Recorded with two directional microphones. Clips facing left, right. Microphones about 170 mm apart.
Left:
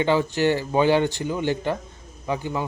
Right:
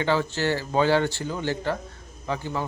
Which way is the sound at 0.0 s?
15° left (ahead or behind).